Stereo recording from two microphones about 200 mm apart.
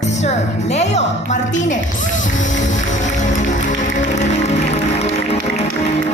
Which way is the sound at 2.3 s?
40° left (ahead or behind).